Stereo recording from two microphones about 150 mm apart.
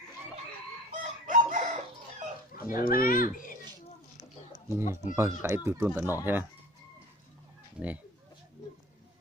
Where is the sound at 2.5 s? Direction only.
75° left (ahead or behind).